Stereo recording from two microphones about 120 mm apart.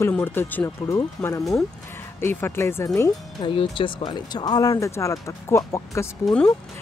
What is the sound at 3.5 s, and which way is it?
Speech, 45° left (ahead or behind).